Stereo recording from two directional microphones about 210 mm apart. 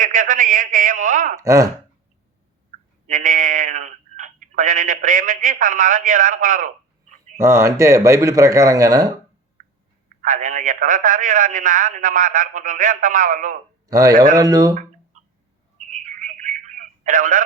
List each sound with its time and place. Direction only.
0.0 s speech: 40° right (ahead or behind)
1.4 s speech: 15° right (ahead or behind)
3.1 s speech: 40° right (ahead or behind)
7.3 s speech: 15° right (ahead or behind)
10.2 s speech: 40° right (ahead or behind)
13.8 s a man's voice: 15° right (ahead or behind)
16.0 s telephone: 35° right (ahead or behind)